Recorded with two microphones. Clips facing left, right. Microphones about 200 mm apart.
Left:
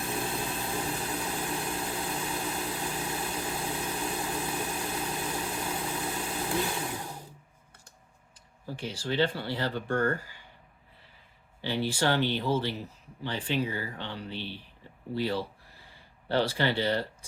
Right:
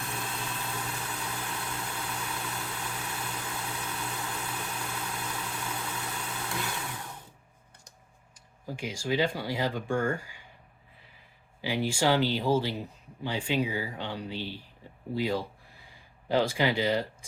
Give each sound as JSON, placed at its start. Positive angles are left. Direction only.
{"t": 0.3, "sound": "vehicle", "side_deg": 30}
{"t": 4.8, "sound": "engine", "side_deg": 30}
{"t": 8.6, "sound": "speech", "side_deg": -10}
{"t": 11.6, "sound": "speech", "side_deg": -10}